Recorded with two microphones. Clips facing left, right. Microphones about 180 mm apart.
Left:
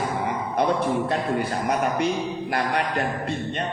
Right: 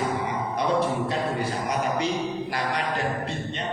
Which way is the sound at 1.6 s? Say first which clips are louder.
Left 3 dB; 55° left (ahead or behind).